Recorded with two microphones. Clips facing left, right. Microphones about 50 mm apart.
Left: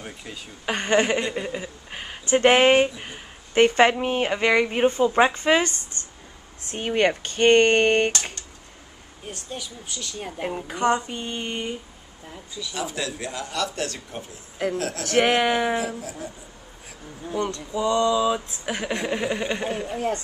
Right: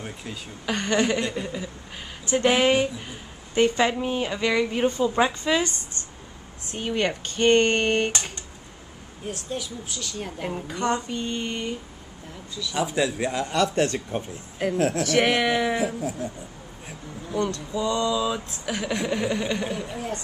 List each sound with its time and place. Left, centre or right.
0.0 s speech: centre
0.7 s a woman's voice: left
9.3 s a woman's voice: centre
12.7 s speech: centre
15.1 s a woman's voice: left
15.4 s speech: centre
17.3 s speech: left